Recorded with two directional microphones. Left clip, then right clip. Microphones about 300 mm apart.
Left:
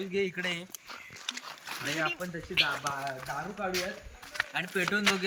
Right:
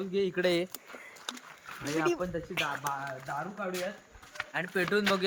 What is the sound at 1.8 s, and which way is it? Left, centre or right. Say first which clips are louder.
Speech: right 2 dB; centre.